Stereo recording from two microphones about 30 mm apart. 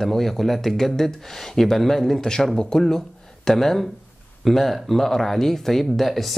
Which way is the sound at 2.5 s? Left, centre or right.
Left.